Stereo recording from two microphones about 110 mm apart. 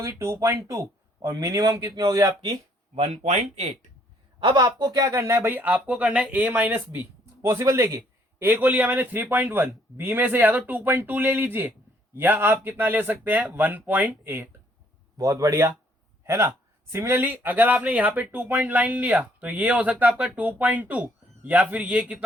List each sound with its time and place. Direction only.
0.0 s speech: 25° right (ahead or behind)
2.9 s speech: 85° right
4.4 s speech: 45° right (ahead or behind); by 14.4 s 15° right (ahead or behind)
15.2 s a man's voice: 30° right (ahead or behind); by 22.2 s 10° right (ahead or behind)